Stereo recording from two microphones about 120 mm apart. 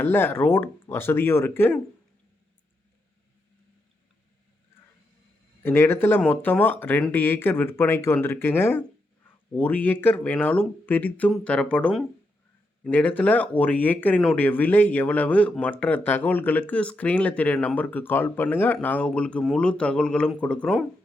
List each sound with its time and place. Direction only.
0.0 s speech: 15° left (ahead or behind)
5.6 s speech: 20° left (ahead or behind)